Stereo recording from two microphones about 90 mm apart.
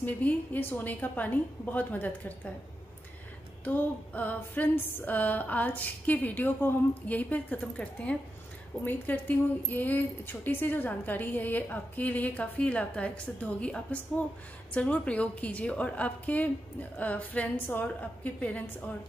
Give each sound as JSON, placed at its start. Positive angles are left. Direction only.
{"t": 0.0, "sound": "a woman's voice", "side_deg": 20}
{"t": 3.6, "sound": "a woman's voice", "side_deg": 20}